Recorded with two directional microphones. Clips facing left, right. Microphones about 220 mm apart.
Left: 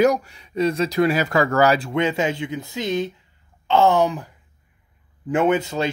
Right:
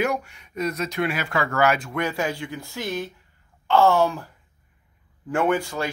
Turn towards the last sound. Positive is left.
turn(degrees=20)  # may be behind; listen again after turning